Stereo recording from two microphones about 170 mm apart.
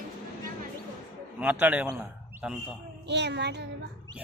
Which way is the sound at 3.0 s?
90° right.